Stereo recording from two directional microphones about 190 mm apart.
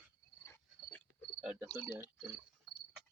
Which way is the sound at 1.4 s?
5° right (ahead or behind).